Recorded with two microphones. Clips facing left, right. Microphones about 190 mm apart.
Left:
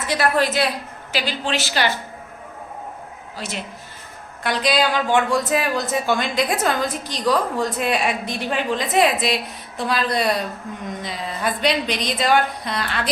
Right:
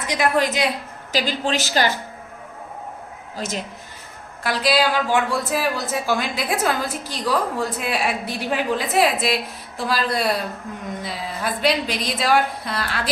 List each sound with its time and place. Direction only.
0.1 s a woman's voice: 15° right (ahead or behind)
1.1 s a woman's voice: 40° right (ahead or behind)
3.3 s a woman's voice: 45° right (ahead or behind)
4.4 s a woman's voice: 5° right (ahead or behind)